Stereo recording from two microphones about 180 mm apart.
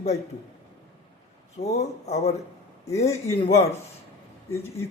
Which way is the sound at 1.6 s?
40° left (ahead or behind).